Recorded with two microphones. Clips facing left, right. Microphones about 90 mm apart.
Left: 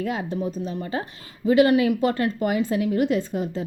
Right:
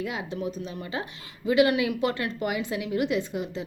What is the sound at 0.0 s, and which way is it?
A woman's voice, 40° left (ahead or behind).